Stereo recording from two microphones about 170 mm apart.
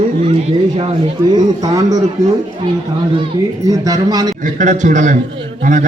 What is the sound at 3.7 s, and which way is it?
Speech, 20° right (ahead or behind).